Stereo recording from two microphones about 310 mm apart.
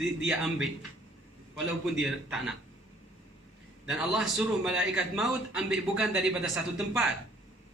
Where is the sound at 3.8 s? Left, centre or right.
Centre.